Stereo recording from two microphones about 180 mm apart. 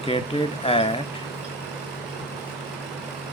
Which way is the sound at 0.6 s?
35° left (ahead or behind).